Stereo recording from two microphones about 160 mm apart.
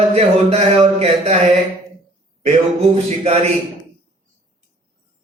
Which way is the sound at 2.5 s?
40° right (ahead or behind).